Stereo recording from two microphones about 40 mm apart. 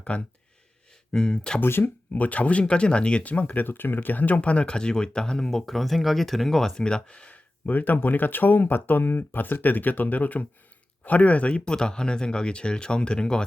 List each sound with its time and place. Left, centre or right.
0.1 s speech: left
1.1 s speech: centre
1.6 s speech: left
2.1 s speech: left
4.4 s speech: left; by 6.7 s centre
6.7 s speech: left
7.6 s speech: left